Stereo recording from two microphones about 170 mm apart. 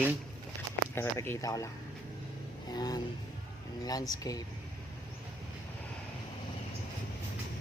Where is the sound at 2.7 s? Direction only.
25° left (ahead or behind).